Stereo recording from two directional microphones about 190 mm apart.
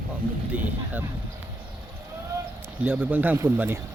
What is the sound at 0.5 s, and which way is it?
Speech, 10° right (ahead or behind).